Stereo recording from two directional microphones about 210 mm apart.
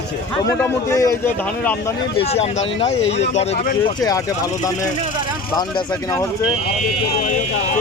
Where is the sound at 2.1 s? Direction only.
30° left (ahead or behind).